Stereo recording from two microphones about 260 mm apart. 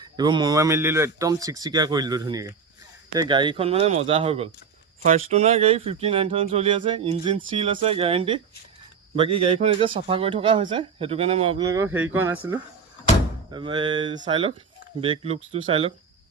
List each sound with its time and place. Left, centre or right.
0.0 s speech: centre
9.4 s speech: right